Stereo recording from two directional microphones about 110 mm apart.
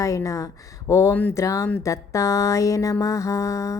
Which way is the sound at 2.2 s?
30° left (ahead or behind).